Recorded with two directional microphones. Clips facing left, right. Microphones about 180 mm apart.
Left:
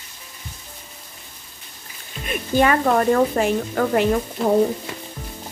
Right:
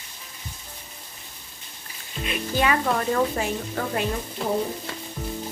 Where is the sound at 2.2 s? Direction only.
50° left (ahead or behind).